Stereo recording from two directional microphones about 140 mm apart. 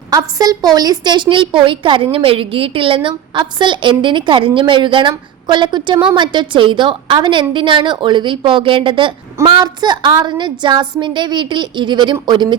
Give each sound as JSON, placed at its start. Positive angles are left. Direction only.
{"t": 0.1, "sound": "a woman's voice", "side_deg": -25}